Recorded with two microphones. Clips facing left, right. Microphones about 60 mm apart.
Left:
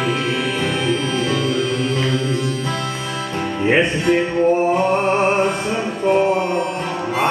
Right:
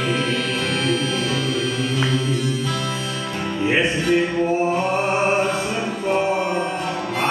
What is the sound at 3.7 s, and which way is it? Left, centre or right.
Music, left.